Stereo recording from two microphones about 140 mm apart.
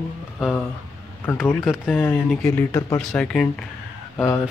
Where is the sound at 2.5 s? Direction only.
20° left (ahead or behind).